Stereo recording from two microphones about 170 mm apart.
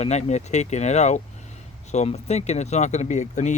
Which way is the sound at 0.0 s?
40° left (ahead or behind).